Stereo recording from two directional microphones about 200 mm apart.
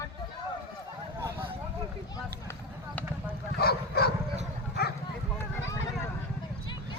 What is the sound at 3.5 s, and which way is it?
Dog, 50° left (ahead or behind).